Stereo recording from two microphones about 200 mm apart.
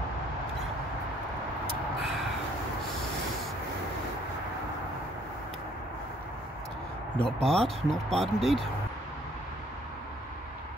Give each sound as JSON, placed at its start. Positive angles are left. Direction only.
{"t": 7.2, "sound": "speech", "side_deg": 5}